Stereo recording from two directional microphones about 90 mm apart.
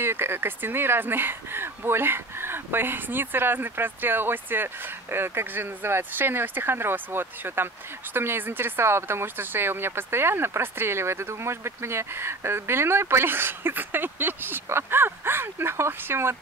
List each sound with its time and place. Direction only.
0.0 s speech: 25° right (ahead or behind)